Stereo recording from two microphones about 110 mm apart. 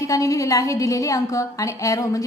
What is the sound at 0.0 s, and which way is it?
A woman's voice, 30° left (ahead or behind).